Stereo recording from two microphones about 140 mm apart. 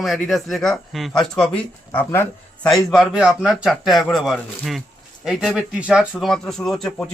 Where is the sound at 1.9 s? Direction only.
15° left (ahead or behind).